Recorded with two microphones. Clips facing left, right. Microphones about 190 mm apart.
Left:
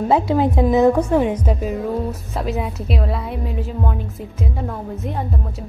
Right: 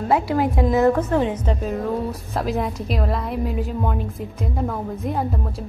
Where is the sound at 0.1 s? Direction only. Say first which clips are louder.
Left 2 dB; 20° left (ahead or behind).